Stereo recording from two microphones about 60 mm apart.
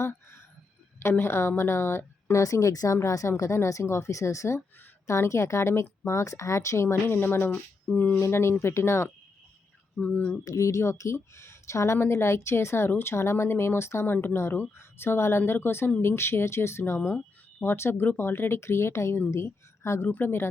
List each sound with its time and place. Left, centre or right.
1.1 s speech: left
2.4 s speech: left
3.0 s speech: left
8.2 s speech: left
10.4 s speech: left
20.1 s speech: left